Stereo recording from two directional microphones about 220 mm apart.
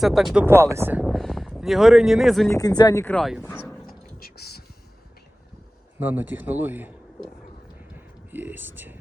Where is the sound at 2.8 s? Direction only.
15° left (ahead or behind).